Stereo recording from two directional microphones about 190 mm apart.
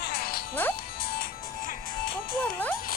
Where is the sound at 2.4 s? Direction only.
10° left (ahead or behind).